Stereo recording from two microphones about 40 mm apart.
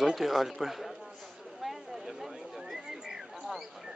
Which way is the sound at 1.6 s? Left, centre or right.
Centre.